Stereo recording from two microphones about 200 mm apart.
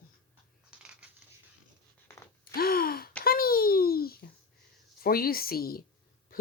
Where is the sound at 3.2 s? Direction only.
50° left (ahead or behind).